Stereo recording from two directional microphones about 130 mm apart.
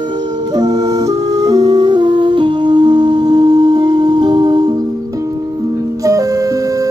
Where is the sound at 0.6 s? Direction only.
30° right (ahead or behind).